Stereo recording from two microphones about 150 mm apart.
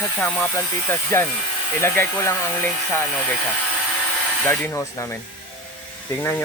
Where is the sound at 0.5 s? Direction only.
15° left (ahead or behind).